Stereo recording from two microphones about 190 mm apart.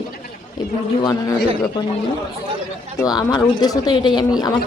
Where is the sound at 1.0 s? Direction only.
20° left (ahead or behind).